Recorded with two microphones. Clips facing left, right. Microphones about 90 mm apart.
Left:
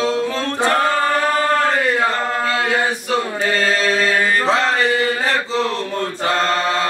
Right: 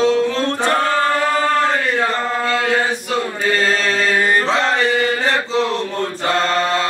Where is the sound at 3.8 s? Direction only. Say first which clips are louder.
Left 1 dB; 5° left (ahead or behind).